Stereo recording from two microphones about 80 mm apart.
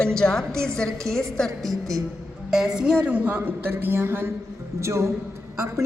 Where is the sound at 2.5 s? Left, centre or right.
Centre.